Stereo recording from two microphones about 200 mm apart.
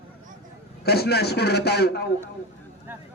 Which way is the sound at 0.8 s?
55° left (ahead or behind).